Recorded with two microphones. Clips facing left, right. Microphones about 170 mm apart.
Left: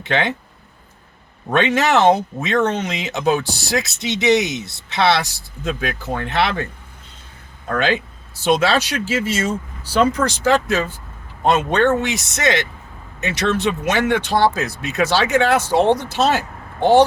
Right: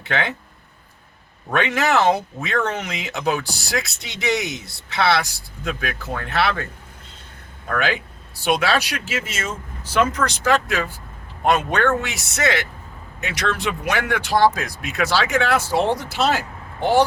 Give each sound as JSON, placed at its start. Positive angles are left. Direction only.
{"t": 0.0, "sound": "speech", "side_deg": 20}
{"t": 1.5, "sound": "speech", "side_deg": 25}
{"t": 7.7, "sound": "speech", "side_deg": 25}